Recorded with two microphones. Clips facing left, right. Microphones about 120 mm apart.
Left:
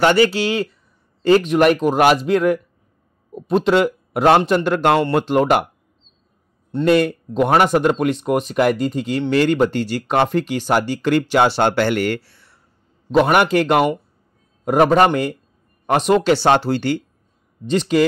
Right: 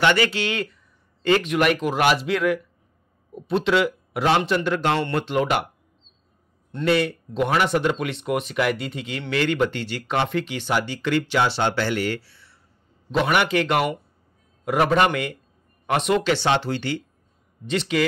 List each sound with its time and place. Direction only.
0.0 s a man's voice: 35° left (ahead or behind)
6.8 s speech: 50° left (ahead or behind)